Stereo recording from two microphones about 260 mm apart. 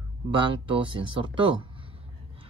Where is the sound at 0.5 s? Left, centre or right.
Centre.